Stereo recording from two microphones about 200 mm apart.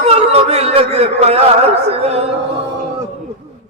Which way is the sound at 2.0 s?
30° right (ahead or behind).